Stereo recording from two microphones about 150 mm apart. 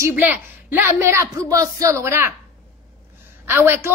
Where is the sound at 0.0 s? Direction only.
15° right (ahead or behind).